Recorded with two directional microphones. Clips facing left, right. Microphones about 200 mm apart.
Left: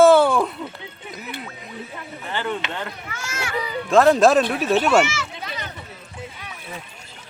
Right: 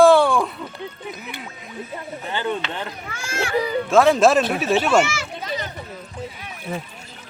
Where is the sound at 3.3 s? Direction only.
40° right (ahead or behind).